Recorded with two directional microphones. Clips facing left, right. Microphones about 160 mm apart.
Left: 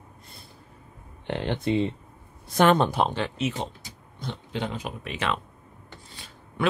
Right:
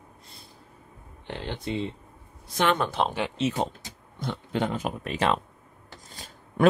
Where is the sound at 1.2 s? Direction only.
65° left (ahead or behind).